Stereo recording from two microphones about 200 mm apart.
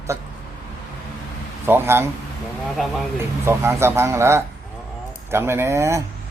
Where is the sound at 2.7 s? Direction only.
Centre (ahead or behind).